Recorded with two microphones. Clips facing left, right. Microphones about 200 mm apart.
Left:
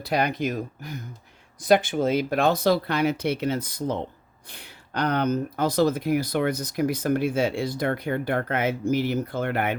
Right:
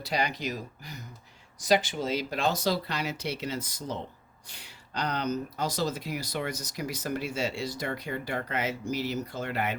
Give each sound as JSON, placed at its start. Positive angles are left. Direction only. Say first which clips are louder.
{"t": 0.0, "sound": "speech", "louder": "left 6 dB", "side_deg": 55}